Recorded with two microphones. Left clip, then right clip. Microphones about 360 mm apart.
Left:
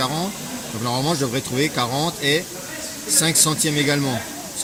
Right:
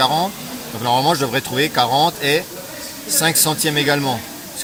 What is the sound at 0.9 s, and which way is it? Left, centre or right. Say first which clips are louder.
Speech: right 7 dB; right.